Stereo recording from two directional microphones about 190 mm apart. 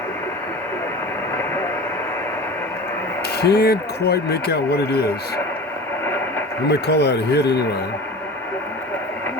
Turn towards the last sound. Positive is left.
turn(degrees=60)  # may be behind; listen again after turning